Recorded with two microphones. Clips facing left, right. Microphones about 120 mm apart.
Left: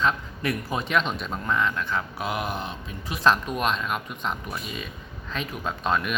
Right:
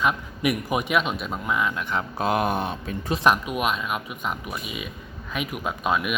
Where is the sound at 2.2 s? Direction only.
45° right (ahead or behind).